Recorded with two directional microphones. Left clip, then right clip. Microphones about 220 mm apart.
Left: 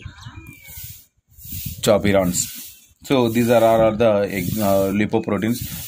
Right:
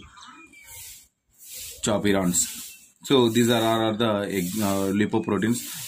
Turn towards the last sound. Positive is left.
turn(degrees=20)  # may be behind; listen again after turning